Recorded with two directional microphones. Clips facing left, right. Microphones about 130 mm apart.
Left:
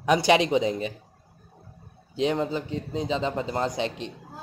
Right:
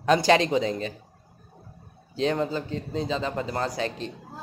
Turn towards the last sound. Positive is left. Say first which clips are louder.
# left 1 dB
turn(degrees=20)  # may be behind; listen again after turning